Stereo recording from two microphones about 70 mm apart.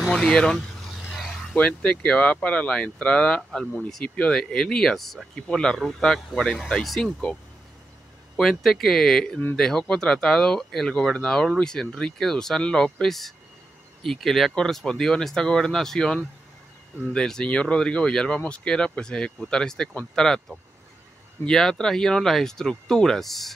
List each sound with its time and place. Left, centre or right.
0.0 s speech: centre
8.4 s speech: centre